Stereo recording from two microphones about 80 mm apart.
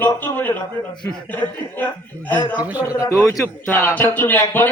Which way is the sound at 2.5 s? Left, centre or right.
Centre.